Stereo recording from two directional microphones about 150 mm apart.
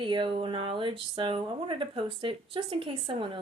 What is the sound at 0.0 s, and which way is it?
A woman's voice, 35° right (ahead or behind).